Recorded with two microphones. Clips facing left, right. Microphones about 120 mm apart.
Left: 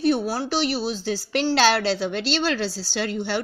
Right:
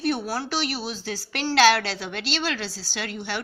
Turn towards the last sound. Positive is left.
turn(degrees=30)  # may be behind; listen again after turning